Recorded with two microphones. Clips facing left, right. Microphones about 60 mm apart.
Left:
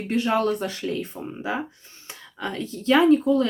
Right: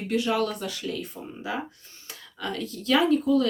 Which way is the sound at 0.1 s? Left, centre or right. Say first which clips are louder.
Left 3 dB; left.